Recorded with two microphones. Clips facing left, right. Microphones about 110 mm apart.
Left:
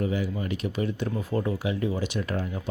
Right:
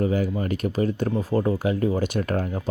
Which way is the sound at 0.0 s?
45° right (ahead or behind).